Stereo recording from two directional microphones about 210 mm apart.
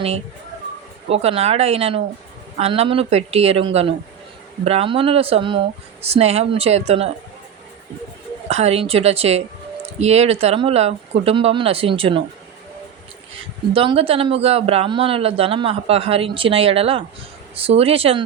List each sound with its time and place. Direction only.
1.0 s a man's voice: 30° right (ahead or behind)
8.4 s a man's voice: 30° right (ahead or behind)
13.7 s a man's voice: 25° right (ahead or behind)